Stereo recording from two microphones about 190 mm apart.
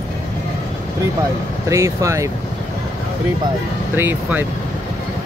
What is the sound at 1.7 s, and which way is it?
Speech, 15° right (ahead or behind).